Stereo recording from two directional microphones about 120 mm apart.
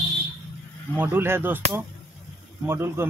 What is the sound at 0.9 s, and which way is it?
Speech, 15° right (ahead or behind).